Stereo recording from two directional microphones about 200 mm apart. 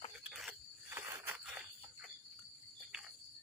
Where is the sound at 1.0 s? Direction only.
10° right (ahead or behind).